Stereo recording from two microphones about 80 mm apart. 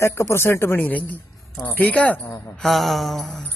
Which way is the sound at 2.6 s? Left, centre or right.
Centre.